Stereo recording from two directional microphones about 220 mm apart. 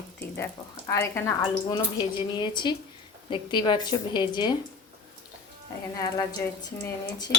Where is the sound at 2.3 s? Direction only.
20° left (ahead or behind).